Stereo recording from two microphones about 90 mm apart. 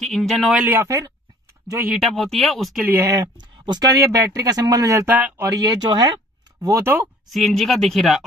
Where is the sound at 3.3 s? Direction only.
55° right (ahead or behind).